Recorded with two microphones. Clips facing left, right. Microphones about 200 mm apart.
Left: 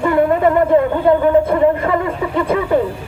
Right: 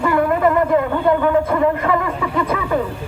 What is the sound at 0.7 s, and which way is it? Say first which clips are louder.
Jingle bell: left 4 dB; 30° left (ahead or behind).